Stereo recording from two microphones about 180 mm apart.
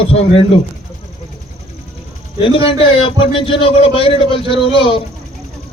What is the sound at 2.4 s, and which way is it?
A man's voice, 30° left (ahead or behind).